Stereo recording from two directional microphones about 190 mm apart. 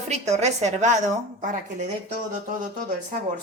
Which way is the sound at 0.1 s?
35° right (ahead or behind).